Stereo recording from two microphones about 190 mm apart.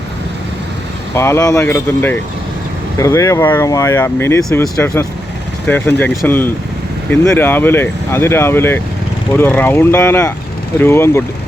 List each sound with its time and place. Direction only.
1.1 s speech: 15° left (ahead or behind)